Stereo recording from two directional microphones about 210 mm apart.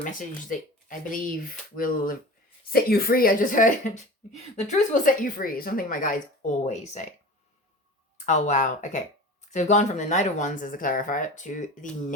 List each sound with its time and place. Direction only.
0.9 s speech: 40° left (ahead or behind)
8.3 s speech: 35° left (ahead or behind)